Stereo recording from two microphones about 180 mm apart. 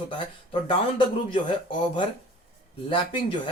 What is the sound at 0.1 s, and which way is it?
Speech, 30° left (ahead or behind).